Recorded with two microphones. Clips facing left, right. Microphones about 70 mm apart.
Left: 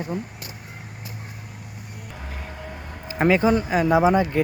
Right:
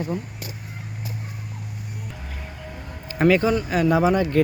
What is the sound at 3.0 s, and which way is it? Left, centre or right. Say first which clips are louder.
Speech: even; centre.